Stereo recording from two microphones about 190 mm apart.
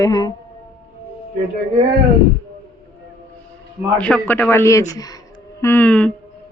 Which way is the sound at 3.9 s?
5° left (ahead or behind).